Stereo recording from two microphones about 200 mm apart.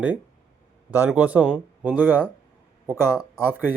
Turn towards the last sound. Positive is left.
turn(degrees=-10)  # may be behind; listen again after turning